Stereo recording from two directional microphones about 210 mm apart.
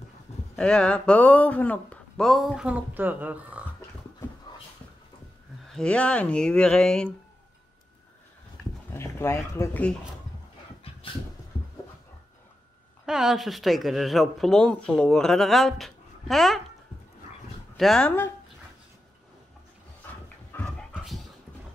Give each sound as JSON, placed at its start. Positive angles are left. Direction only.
{"t": 0.6, "sound": "speech", "side_deg": 5}
{"t": 4.5, "sound": "a sound", "side_deg": 20}
{"t": 5.7, "sound": "speech", "side_deg": 5}
{"t": 8.9, "sound": "speech", "side_deg": 10}
{"t": 13.0, "sound": "speech", "side_deg": 0}
{"t": 17.7, "sound": "speech", "side_deg": 0}
{"t": 20.5, "sound": "dog", "side_deg": 10}
{"t": 20.9, "sound": "dog", "side_deg": 0}